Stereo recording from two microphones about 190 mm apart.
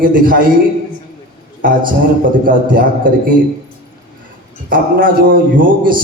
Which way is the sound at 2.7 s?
45° right (ahead or behind).